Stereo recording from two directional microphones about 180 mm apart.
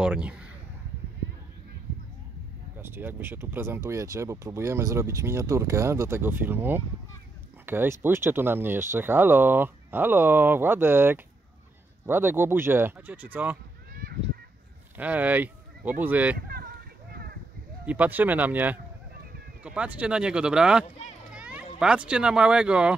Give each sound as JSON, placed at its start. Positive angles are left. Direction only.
{"t": 0.0, "sound": "a sound", "side_deg": -5}
{"t": 2.8, "sound": "speech", "side_deg": -10}
{"t": 15.0, "sound": "speech", "side_deg": -10}
{"t": 16.3, "sound": "a sound", "side_deg": -55}
{"t": 17.8, "sound": "speech", "side_deg": -10}
{"t": 21.4, "sound": "children playing", "side_deg": -5}
{"t": 21.7, "sound": "speech", "side_deg": -5}